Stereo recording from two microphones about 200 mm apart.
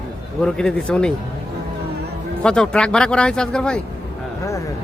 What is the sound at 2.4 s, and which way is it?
Speech, 5° left (ahead or behind).